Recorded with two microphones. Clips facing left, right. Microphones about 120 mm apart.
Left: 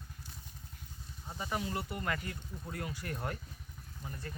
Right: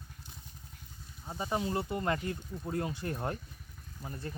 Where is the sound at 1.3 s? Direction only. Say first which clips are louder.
Right 4 dB; 25° right (ahead or behind).